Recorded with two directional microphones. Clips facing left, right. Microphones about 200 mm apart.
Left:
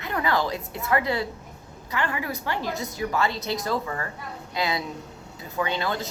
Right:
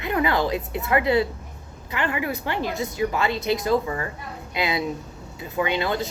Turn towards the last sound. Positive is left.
turn(degrees=-20)  # may be behind; listen again after turning